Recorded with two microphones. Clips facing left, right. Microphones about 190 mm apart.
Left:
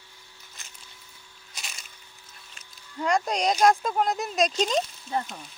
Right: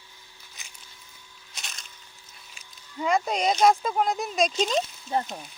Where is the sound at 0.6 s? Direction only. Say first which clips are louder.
Even; centre (ahead or behind).